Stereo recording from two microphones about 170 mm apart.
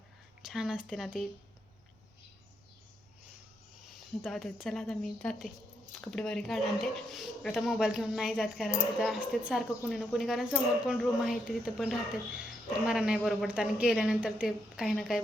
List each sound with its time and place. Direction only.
0.4 s speech: 5° right (ahead or behind)
4.2 s speech: centre (ahead or behind)